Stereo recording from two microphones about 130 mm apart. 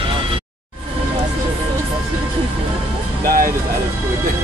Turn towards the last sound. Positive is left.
turn(degrees=-90)